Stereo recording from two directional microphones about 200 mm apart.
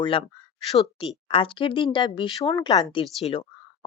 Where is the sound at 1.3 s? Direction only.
25° left (ahead or behind).